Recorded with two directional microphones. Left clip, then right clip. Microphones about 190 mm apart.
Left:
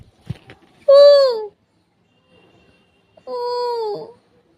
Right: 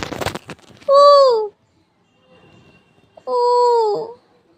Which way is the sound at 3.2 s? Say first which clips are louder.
Right 8 dB; 15° left (ahead or behind).